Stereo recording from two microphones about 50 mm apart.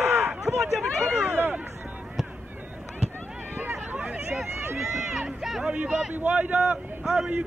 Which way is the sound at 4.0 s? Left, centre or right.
Right.